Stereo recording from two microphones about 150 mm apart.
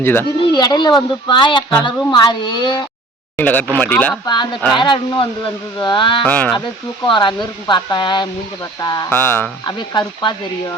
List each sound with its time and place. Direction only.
0.0 s speech: 15° left (ahead or behind)
0.5 s speech: 30° left (ahead or behind)
3.3 s speech: 10° left (ahead or behind)
4.3 s speech: 30° left (ahead or behind)
6.2 s speech: 10° left (ahead or behind)
7.0 s speech: 30° left (ahead or behind)
9.0 s speech: 15° left (ahead or behind)
9.6 s speech: 30° left (ahead or behind)